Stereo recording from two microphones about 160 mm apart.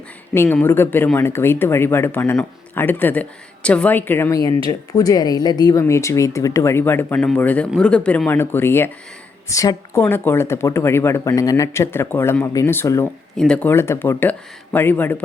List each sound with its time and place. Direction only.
0.3 s speech: 10° left (ahead or behind)
13.3 s speech: 5° left (ahead or behind)